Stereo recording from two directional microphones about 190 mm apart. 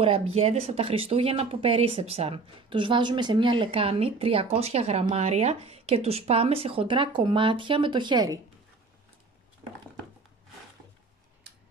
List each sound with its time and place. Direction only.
0.0 s speech: 30° right (ahead or behind)